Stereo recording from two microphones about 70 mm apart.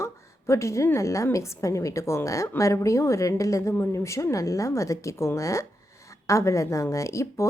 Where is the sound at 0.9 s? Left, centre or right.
Left.